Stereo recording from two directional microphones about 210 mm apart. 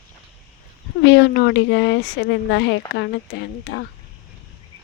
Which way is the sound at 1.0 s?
55° left (ahead or behind).